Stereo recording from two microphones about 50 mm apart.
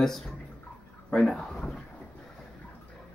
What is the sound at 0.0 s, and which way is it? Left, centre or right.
Speech, centre.